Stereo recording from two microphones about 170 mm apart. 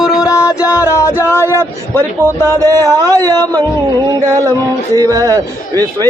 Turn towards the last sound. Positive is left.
turn(degrees=-20)  # may be behind; listen again after turning